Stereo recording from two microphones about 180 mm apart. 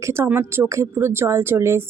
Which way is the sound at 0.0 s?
15° right (ahead or behind).